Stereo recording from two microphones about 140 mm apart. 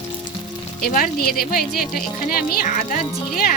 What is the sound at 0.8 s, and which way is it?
Speech, 80° left.